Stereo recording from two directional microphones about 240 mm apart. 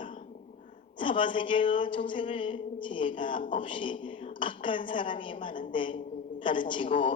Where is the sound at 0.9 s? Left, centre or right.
Left.